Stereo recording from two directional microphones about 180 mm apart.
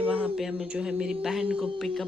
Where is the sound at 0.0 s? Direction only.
10° right (ahead or behind).